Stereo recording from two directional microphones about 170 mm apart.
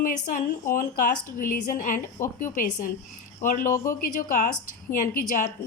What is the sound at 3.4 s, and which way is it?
A woman's voice, 50° left (ahead or behind).